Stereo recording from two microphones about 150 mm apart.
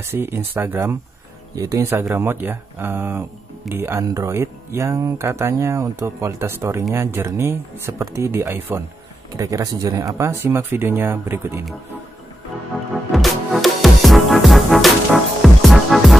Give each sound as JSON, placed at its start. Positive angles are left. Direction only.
{"t": 0.0, "sound": "speech", "side_deg": -15}
{"t": 13.1, "sound": "music", "side_deg": 0}